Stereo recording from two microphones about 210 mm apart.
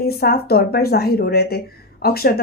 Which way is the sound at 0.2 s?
45° left (ahead or behind).